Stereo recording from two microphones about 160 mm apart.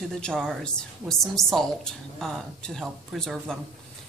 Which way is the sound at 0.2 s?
5° left (ahead or behind).